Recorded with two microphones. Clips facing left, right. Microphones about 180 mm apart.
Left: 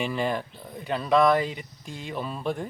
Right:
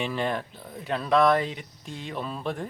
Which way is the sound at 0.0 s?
Centre (ahead or behind).